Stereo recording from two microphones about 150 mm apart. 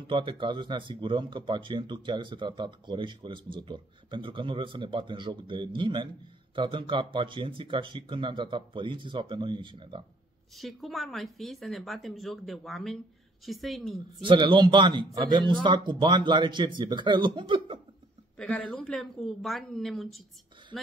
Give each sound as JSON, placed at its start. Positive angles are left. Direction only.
{"t": 0.0, "sound": "speech", "side_deg": -35}
{"t": 10.6, "sound": "speech", "side_deg": 0}
{"t": 14.2, "sound": "speech", "side_deg": -35}
{"t": 18.4, "sound": "speech", "side_deg": 5}